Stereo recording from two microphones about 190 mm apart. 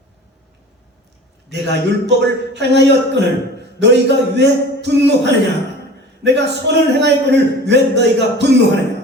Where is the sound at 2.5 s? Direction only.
65° right (ahead or behind).